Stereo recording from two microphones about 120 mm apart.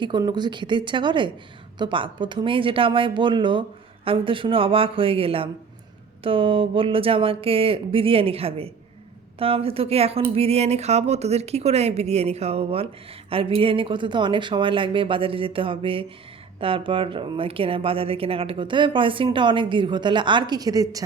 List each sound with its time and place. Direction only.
0.0 s speech: 40° right (ahead or behind)